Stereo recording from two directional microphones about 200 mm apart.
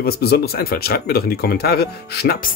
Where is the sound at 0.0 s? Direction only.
50° left (ahead or behind).